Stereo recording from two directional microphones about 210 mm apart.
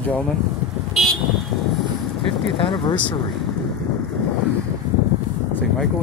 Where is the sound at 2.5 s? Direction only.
25° left (ahead or behind).